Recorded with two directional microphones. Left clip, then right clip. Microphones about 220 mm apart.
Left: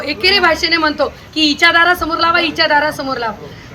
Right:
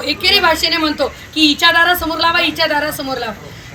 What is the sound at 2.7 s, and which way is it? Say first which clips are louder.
Speech: left 4 dB; 20° left (ahead or behind).